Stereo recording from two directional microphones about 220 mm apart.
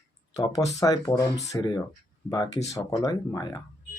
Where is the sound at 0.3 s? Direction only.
15° left (ahead or behind).